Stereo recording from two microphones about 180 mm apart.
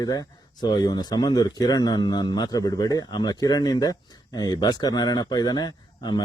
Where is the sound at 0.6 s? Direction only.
25° left (ahead or behind).